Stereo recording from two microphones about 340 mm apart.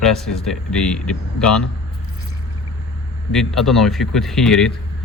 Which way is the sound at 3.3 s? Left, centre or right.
Centre.